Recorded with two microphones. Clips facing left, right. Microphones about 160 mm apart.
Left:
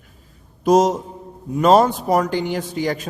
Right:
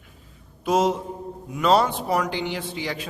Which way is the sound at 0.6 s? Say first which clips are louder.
Left 6 dB; 40° left (ahead or behind).